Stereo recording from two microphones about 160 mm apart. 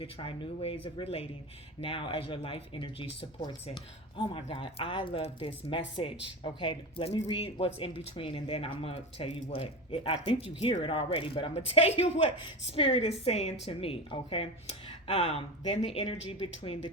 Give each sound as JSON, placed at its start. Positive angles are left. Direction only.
{"t": 0.0, "sound": "speech", "side_deg": 35}